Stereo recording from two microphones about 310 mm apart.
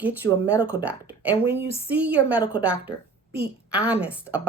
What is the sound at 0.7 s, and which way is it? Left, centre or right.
Speech, centre.